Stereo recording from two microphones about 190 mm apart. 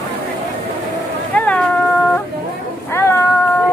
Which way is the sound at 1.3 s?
5° left (ahead or behind).